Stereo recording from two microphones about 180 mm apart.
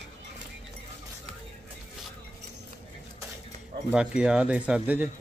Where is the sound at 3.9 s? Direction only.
5° right (ahead or behind).